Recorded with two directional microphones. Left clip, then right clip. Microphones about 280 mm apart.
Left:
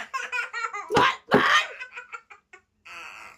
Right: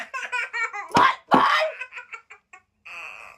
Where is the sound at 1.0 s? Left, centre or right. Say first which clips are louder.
Right 3 dB; centre.